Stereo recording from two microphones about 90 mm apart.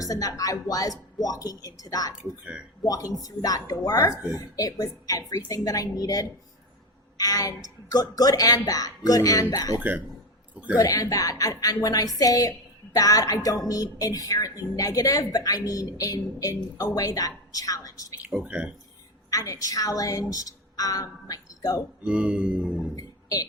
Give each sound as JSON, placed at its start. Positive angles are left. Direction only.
{"t": 0.0, "sound": "speech", "side_deg": 40}
{"t": 4.1, "sound": "music", "side_deg": -10}
{"t": 4.4, "sound": "a woman's voice", "side_deg": 40}
{"t": 10.5, "sound": "speech", "side_deg": -15}
{"t": 10.8, "sound": "a woman's voice", "side_deg": 40}
{"t": 18.4, "sound": "music", "side_deg": -15}
{"t": 19.3, "sound": "speech", "side_deg": 40}
{"t": 22.0, "sound": "music", "side_deg": -15}
{"t": 23.0, "sound": "music", "side_deg": 45}